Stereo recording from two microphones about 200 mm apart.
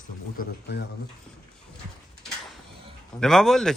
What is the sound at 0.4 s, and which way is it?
Speech, 45° left (ahead or behind).